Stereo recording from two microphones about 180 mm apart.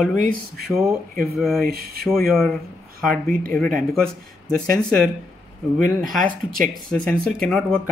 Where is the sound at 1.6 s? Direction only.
60° right (ahead or behind).